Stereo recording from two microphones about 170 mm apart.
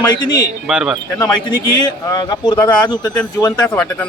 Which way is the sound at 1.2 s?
25° left (ahead or behind).